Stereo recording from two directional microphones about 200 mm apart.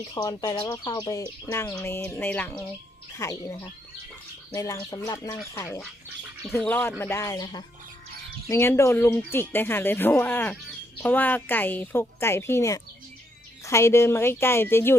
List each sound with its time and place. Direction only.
0.1 s speech: 20° left (ahead or behind)